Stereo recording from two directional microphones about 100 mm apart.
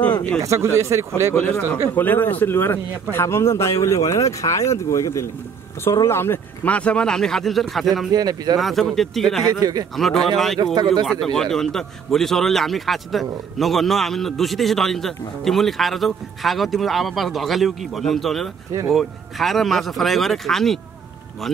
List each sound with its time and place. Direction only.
0.4 s speech: 30° right (ahead or behind)
1.3 s speech: 15° left (ahead or behind); by 8.1 s centre (ahead or behind)
8.1 s speech: 40° right (ahead or behind)
8.5 s speech: centre (ahead or behind)
9.6 s speech: 40° right (ahead or behind)
9.9 s speech: centre (ahead or behind)
10.6 s speech: 45° right (ahead or behind)
11.1 s speech: 5° left (ahead or behind)